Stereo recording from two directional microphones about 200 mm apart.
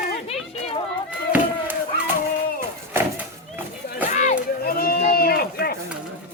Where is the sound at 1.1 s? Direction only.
10° right (ahead or behind).